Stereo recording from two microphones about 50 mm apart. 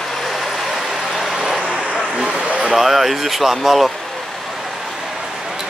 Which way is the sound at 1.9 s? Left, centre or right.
Centre.